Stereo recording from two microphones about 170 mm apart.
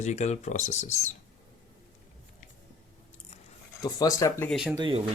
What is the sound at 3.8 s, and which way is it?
Speech, 20° left (ahead or behind).